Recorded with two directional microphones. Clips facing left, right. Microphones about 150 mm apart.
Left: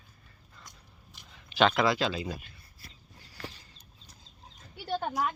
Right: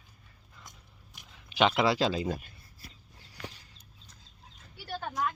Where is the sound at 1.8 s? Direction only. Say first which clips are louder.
Right 1 dB; 35° right (ahead or behind).